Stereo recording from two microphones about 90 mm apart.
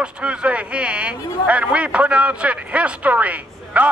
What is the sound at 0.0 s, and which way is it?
Speech, 10° right (ahead or behind).